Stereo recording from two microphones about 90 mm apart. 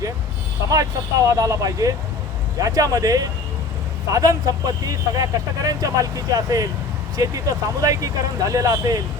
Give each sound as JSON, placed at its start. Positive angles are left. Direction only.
{"t": 0.7, "sound": "speech", "side_deg": -40}